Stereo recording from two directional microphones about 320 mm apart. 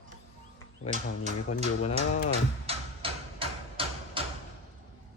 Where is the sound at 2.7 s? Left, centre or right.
Centre.